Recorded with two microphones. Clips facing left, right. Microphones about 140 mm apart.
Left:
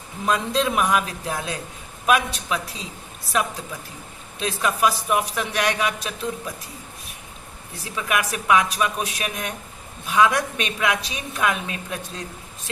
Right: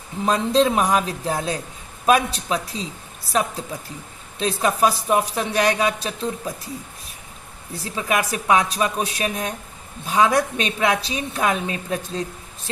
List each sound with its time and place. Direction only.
0.3 s a man's voice: 35° right (ahead or behind)
4.4 s a man's voice: 35° right (ahead or behind)
7.9 s a man's voice: 30° right (ahead or behind)